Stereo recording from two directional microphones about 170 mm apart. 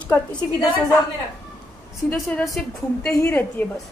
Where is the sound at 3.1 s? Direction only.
15° left (ahead or behind).